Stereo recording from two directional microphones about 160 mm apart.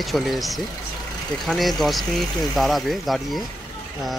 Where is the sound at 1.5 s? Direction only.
Centre (ahead or behind).